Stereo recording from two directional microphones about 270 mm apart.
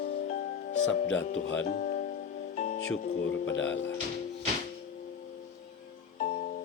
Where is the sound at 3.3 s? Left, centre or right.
Left.